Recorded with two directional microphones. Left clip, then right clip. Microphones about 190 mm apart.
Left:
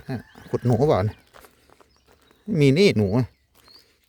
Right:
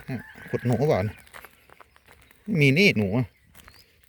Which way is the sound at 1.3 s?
25° right (ahead or behind).